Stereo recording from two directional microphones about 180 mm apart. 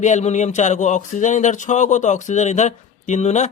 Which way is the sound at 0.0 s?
40° left (ahead or behind).